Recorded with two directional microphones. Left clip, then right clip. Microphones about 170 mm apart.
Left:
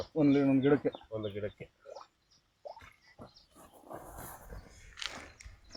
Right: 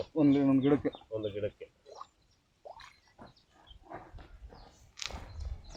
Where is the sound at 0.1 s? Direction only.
35° left (ahead or behind).